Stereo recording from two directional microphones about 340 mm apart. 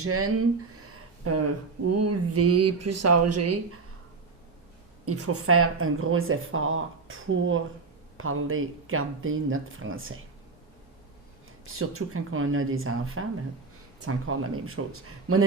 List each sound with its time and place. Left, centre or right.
0.0 s speech: right
0.8 s a sound: right
1.9 s speech: right
5.0 s speech: right
11.6 s speech: right